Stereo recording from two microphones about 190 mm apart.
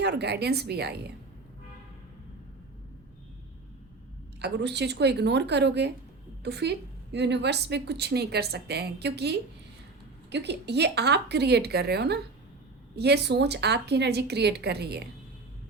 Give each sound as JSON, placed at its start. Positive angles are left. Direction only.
{"t": 0.0, "sound": "a woman's voice", "side_deg": -60}
{"t": 4.4, "sound": "a woman's voice", "side_deg": -60}